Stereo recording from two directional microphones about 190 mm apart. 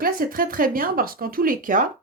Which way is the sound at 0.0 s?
50° right (ahead or behind).